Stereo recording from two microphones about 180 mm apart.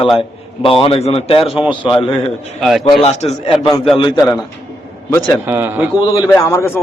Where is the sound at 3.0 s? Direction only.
35° left (ahead or behind).